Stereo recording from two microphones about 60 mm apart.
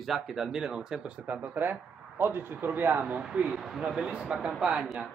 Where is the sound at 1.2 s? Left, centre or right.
Right.